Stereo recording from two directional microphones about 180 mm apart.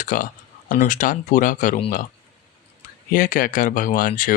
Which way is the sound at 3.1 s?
50° left (ahead or behind).